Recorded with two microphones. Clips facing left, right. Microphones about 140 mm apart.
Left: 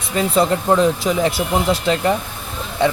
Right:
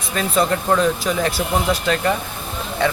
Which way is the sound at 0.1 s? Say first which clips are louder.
Left 3 dB; 20° left (ahead or behind).